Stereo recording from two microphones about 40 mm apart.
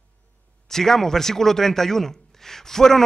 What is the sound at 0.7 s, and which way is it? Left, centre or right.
Speech, centre.